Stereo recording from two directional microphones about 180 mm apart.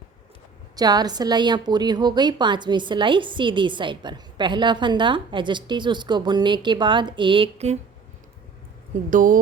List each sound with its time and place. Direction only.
0.8 s a woman's voice: 20° right (ahead or behind)
9.0 s speech: 50° right (ahead or behind)